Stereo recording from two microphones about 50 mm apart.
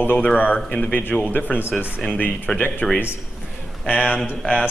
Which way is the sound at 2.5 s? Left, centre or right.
Centre.